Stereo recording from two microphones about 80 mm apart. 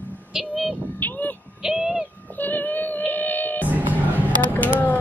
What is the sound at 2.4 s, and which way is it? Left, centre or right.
Music, left.